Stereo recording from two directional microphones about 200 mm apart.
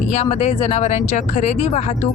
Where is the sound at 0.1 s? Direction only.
30° left (ahead or behind).